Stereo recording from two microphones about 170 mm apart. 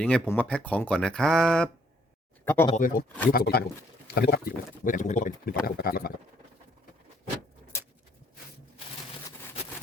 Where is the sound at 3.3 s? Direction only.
60° left (ahead or behind).